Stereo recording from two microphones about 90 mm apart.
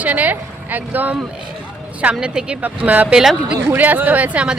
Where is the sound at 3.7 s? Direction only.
20° right (ahead or behind).